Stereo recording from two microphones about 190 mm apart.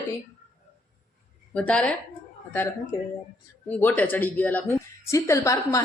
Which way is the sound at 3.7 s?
10° left (ahead or behind).